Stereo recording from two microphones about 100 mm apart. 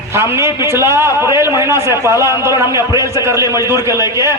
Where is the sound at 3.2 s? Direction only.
30° right (ahead or behind).